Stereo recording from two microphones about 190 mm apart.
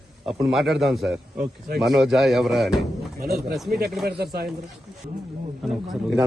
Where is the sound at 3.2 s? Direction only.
55° right (ahead or behind).